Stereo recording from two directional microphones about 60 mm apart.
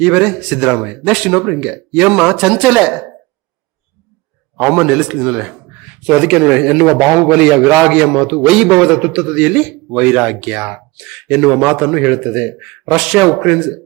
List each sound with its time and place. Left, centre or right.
0.0 s a man's voice: centre
4.5 s a man's voice: centre